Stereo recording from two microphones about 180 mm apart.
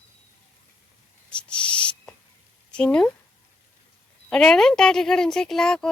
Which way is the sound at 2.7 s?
5° left (ahead or behind).